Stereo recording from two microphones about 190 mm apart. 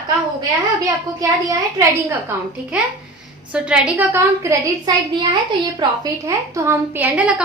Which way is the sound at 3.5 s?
5° right (ahead or behind).